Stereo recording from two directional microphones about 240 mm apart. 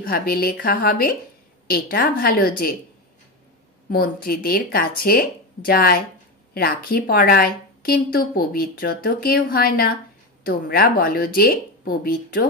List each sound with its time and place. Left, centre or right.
0.0 s a woman's voice: left
3.9 s a woman's voice: left